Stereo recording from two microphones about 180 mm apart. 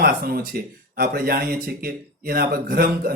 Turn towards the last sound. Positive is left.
turn(degrees=-55)  # may be behind; listen again after turning